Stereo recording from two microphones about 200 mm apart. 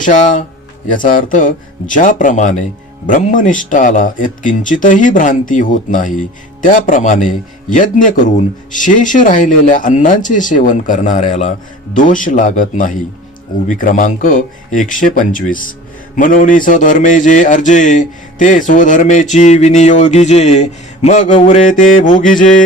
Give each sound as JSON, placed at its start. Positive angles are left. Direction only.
{"t": 0.0, "sound": "a man's voice", "side_deg": 40}